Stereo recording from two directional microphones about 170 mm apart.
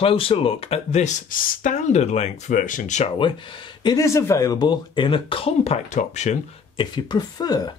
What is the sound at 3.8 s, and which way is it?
Speech, 20° left (ahead or behind).